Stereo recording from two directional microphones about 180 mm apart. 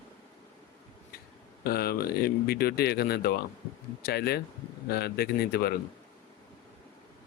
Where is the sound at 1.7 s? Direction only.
60° left (ahead or behind).